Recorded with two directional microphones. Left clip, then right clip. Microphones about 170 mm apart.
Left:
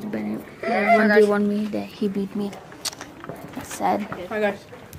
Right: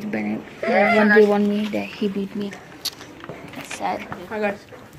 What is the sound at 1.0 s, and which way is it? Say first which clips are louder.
Speech: right 2 dB; 25° left (ahead or behind).